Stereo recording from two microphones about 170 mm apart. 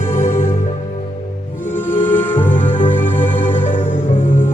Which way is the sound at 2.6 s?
50° left (ahead or behind).